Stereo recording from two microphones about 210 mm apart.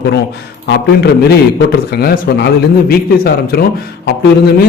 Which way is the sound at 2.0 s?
45° left (ahead or behind).